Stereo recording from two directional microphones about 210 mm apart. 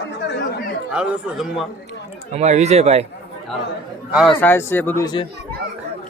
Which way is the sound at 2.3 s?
30° right (ahead or behind).